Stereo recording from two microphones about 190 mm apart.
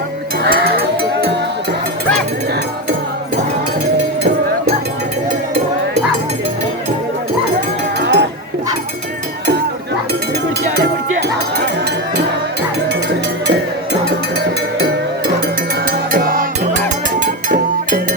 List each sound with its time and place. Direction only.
0.4 s sheep: 55° right (ahead or behind)
8.0 s a sound: 65° right (ahead or behind)
15.9 s music: 50° right (ahead or behind)